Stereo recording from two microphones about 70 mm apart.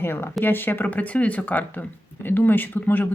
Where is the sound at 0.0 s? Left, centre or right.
Left.